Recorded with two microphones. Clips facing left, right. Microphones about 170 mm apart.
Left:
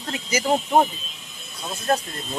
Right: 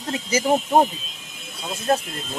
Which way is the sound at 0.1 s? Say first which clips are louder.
Right 3 dB; 30° right (ahead or behind).